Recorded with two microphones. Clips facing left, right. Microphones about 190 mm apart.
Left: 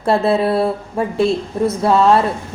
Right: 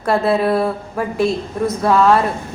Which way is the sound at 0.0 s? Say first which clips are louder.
Left 1 dB; 25° left (ahead or behind).